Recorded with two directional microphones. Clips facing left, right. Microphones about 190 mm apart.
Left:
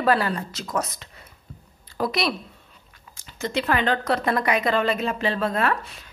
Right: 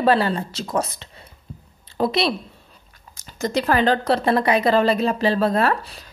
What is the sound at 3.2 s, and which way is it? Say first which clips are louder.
Speech: right 4 dB; 40° right (ahead or behind).